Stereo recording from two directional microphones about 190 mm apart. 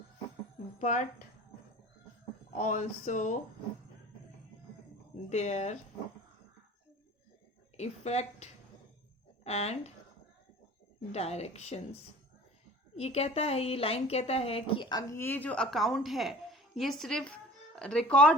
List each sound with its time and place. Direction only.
0.8 s speech: 40° left (ahead or behind)
2.6 s a woman's voice: 40° left (ahead or behind)
5.3 s a woman's voice: 35° left (ahead or behind)
7.8 s a woman's voice: 35° left (ahead or behind)
11.1 s a woman's voice: 35° left (ahead or behind)
13.0 s a woman's voice: 35° left (ahead or behind); by 18.3 s 5° left (ahead or behind)